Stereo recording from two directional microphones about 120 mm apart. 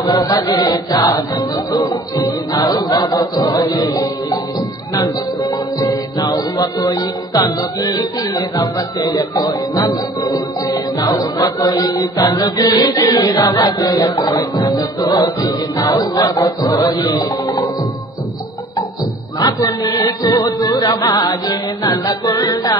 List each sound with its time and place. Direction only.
0.0 s music: 30° left (ahead or behind)
19.4 s music: 30° left (ahead or behind)